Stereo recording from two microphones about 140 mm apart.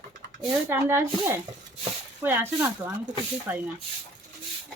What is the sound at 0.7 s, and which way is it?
Speech, 20° right (ahead or behind).